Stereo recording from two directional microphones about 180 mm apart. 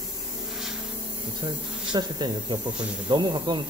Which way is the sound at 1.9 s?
25° right (ahead or behind).